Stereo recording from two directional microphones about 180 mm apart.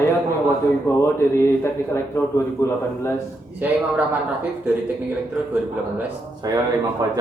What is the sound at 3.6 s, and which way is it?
Speech, 10° right (ahead or behind).